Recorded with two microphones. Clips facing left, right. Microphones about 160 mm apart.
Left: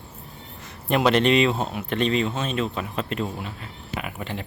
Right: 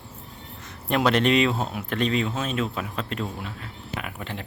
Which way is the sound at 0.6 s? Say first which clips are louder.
Left 2 dB; centre (ahead or behind).